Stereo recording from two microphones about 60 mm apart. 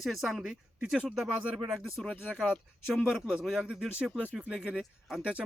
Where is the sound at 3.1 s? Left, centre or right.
Centre.